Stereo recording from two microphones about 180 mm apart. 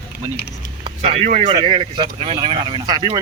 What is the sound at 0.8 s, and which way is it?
Speech, 30° right (ahead or behind).